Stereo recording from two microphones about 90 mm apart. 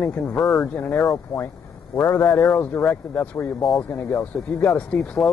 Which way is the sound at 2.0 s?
30° left (ahead or behind).